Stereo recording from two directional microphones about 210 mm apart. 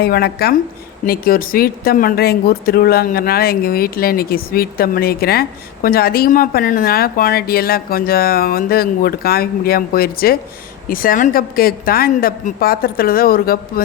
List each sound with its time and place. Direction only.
0.0 s speech: 50° left (ahead or behind)